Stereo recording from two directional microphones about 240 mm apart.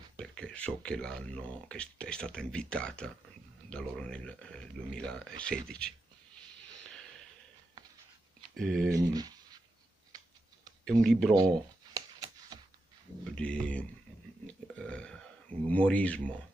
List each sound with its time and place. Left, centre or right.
0.2 s speech: centre
8.5 s speech: centre
8.9 s speech: centre
10.9 s speech: centre
11.3 s a sound: centre
13.2 s speech: centre
14.4 s burping: centre
15.7 s speech: centre